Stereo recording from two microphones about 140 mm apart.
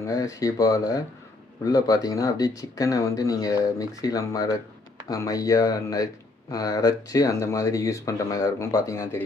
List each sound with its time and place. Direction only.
0.0 s speech: 20° left (ahead or behind)